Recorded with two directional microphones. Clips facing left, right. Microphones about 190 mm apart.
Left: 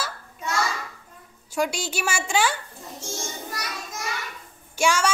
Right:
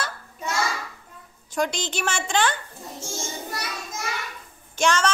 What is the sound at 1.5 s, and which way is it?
A woman's voice, 10° left (ahead or behind).